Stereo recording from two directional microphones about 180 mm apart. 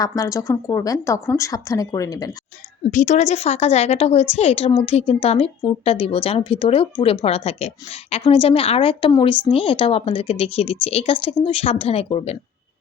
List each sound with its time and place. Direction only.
0.0 s speech: 20° left (ahead or behind)
2.9 s a woman's voice: 40° left (ahead or behind)